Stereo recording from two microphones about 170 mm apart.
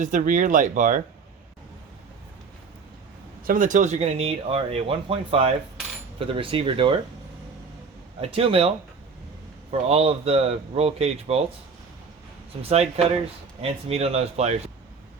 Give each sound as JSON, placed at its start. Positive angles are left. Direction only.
{"t": 0.0, "sound": "speech", "side_deg": -50}
{"t": 3.4, "sound": "speech", "side_deg": -55}
{"t": 8.2, "sound": "speech", "side_deg": -35}
{"t": 9.9, "sound": "speech", "side_deg": -35}
{"t": 12.6, "sound": "speech", "side_deg": -40}